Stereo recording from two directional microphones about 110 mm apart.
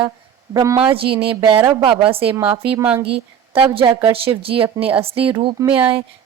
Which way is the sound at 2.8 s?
10° right (ahead or behind).